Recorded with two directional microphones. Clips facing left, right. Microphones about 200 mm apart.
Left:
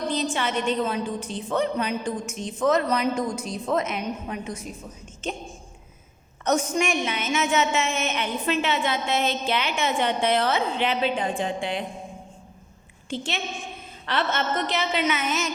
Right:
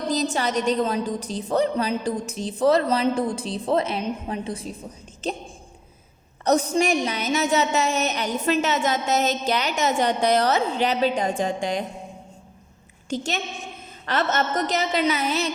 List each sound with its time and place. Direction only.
0.3 s a woman's voice: 40° right (ahead or behind)
6.4 s a woman's voice: 35° right (ahead or behind)
13.1 s a woman's voice: 45° right (ahead or behind)